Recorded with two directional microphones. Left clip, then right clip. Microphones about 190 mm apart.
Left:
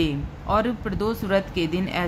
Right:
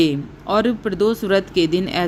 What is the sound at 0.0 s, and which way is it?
Speech, 25° right (ahead or behind).